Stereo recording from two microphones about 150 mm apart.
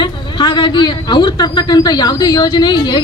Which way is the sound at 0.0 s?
30° left (ahead or behind).